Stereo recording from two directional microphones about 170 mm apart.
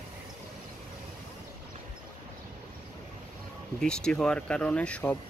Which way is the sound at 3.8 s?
5° left (ahead or behind).